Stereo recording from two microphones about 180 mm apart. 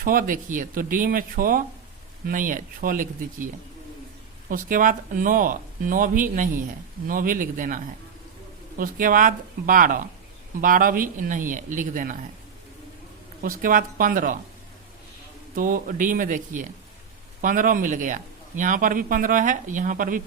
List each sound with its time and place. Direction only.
0.0 s speech: 50° right (ahead or behind)
13.4 s speech: 50° right (ahead or behind)
15.5 s speech: 50° right (ahead or behind)